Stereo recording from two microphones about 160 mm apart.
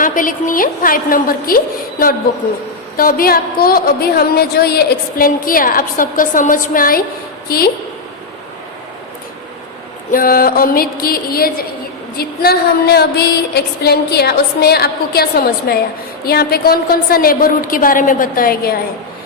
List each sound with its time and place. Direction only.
0.0 s a woman's voice: 55° left (ahead or behind)
10.1 s a woman's voice: 65° left (ahead or behind)